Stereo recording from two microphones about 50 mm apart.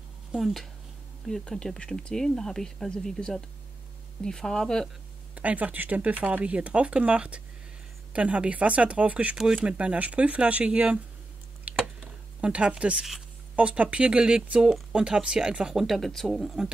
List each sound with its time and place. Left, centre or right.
0.3 s speech: centre
1.2 s speech: centre
5.3 s speech: right
11.7 s a sound: right
12.4 s speech: right
15.8 s speech: centre
16.3 s speech: centre